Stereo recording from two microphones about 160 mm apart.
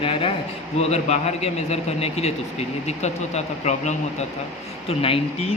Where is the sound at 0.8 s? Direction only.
40° left (ahead or behind).